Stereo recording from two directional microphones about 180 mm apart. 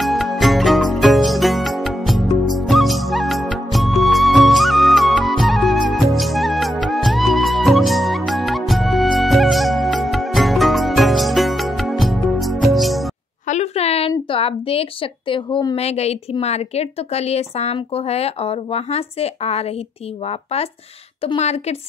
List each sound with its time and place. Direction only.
0.0 s music: centre (ahead or behind)
13.5 s speech: 35° left (ahead or behind)
21.2 s speech: 35° left (ahead or behind)